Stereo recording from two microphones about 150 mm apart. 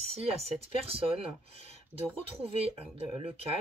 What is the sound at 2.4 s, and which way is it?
Speech, 40° right (ahead or behind).